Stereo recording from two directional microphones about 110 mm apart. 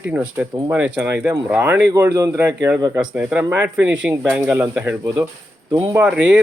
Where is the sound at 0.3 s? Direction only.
15° right (ahead or behind); by 3.0 s 30° right (ahead or behind).